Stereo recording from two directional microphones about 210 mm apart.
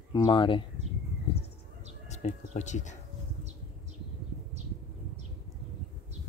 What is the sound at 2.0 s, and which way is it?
Bird, 30° left (ahead or behind).